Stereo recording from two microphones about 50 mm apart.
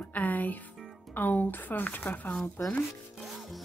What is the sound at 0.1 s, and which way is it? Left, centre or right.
Speech, left.